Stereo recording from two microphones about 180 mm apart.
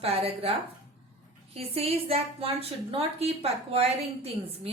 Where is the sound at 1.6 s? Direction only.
35° right (ahead or behind).